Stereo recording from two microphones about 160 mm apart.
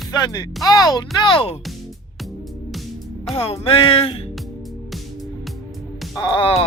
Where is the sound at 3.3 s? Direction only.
35° left (ahead or behind).